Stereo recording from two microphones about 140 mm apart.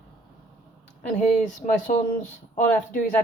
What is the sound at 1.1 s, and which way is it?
Speech, 60° left (ahead or behind).